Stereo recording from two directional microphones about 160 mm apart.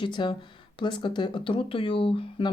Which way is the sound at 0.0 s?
30° left (ahead or behind).